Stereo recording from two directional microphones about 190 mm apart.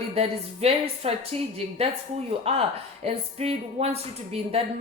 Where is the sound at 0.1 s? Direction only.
30° right (ahead or behind).